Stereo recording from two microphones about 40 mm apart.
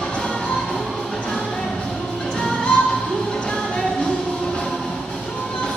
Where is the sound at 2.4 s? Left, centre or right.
Left.